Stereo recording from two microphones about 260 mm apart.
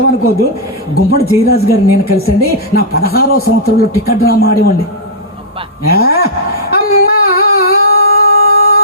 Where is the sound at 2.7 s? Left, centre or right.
Left.